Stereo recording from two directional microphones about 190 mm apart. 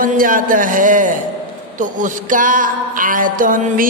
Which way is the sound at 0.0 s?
45° right (ahead or behind).